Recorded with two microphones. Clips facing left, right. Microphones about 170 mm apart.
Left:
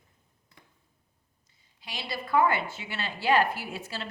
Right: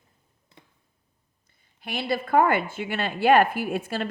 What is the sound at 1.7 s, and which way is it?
A woman's voice, 55° right (ahead or behind).